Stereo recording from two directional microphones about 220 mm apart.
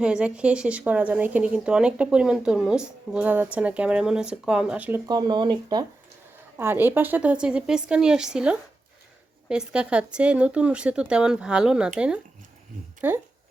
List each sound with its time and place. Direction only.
0.0 s speech: 5° right (ahead or behind)
5.0 s speech: 20° right (ahead or behind)